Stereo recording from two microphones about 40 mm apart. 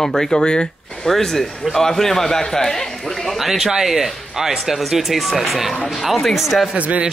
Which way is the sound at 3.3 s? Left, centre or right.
Centre.